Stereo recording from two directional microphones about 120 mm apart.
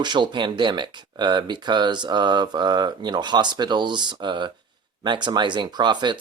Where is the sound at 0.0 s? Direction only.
40° right (ahead or behind).